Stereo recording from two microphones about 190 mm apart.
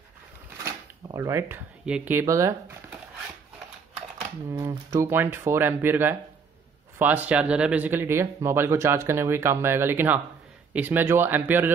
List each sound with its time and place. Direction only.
1.0 s speech: 15° right (ahead or behind)
4.5 s speech: 15° right (ahead or behind)